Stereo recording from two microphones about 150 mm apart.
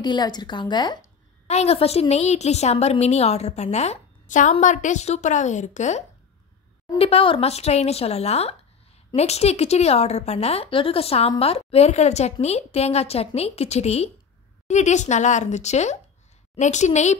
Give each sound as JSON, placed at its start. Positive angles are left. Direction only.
{"t": 0.0, "sound": "a woman's voice", "side_deg": 30}
{"t": 1.5, "sound": "a woman's voice", "side_deg": 45}
{"t": 7.0, "sound": "a woman's voice", "side_deg": 40}